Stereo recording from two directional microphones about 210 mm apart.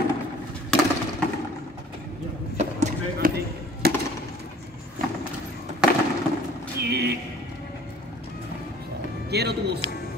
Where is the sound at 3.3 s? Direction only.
50° right (ahead or behind).